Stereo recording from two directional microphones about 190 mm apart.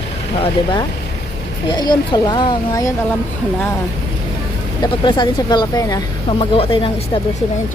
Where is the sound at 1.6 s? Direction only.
20° left (ahead or behind).